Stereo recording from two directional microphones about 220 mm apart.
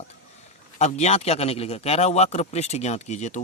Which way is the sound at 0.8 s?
30° left (ahead or behind).